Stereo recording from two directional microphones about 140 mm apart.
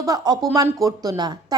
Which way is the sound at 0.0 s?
25° right (ahead or behind).